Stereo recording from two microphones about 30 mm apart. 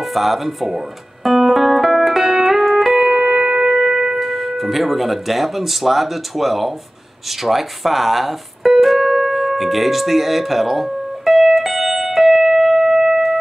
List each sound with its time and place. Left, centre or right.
0.0 s music: centre
2.9 s music: centre
4.2 s speech: centre
7.2 s keyboard: centre